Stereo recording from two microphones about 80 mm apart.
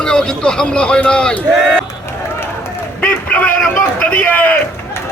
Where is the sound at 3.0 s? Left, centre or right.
Centre.